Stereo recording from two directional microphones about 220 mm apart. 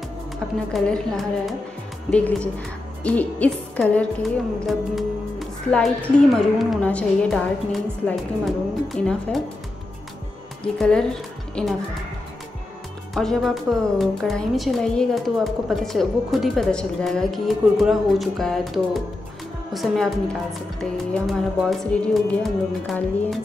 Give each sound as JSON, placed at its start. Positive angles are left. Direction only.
{"t": 0.7, "sound": "a woman's voice", "side_deg": 0}
{"t": 10.6, "sound": "speech", "side_deg": 5}
{"t": 13.1, "sound": "a woman's voice", "side_deg": 0}